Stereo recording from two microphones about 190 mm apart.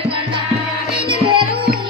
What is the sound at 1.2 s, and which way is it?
Music, 25° right (ahead or behind).